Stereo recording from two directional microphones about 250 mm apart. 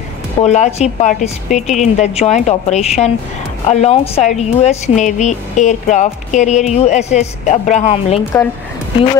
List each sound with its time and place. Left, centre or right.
0.4 s a woman's voice: left